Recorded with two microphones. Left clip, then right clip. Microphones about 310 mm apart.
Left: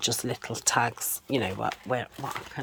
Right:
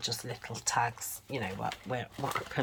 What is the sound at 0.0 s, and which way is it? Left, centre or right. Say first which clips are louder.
Speech: left 7 dB; left.